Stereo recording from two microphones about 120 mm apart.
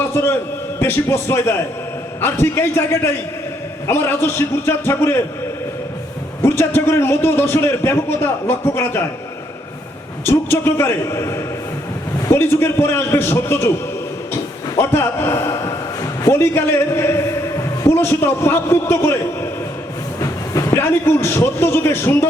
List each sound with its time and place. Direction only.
0.0 s a man's voice: 20° left (ahead or behind)
6.4 s a man's voice: 20° left (ahead or behind)
10.2 s a man's voice: 20° left (ahead or behind)
14.8 s a man's voice: 20° left (ahead or behind)